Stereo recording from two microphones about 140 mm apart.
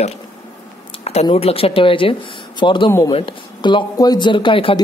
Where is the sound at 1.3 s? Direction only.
45° left (ahead or behind).